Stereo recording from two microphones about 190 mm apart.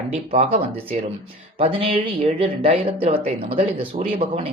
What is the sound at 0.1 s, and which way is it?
Speech, 35° right (ahead or behind).